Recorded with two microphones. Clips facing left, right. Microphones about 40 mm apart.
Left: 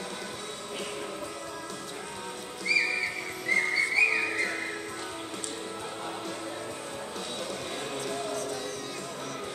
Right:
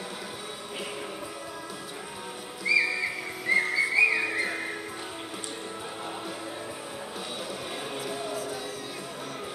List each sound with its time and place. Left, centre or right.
2.6 s music: centre
3.4 s whistling: centre
8.1 s music: centre